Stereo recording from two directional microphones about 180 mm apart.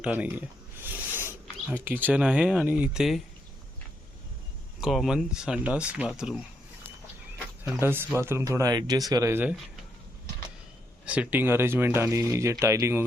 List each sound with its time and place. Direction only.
0.0 s speech: 10° right (ahead or behind)
0.8 s a sound: 10° right (ahead or behind)
1.8 s speech: 10° right (ahead or behind)
4.8 s speech: centre (ahead or behind)
7.6 s speech: 10° right (ahead or behind)
11.0 s speech: 5° right (ahead or behind)